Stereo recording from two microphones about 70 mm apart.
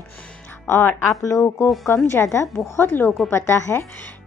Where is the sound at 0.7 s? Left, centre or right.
Left.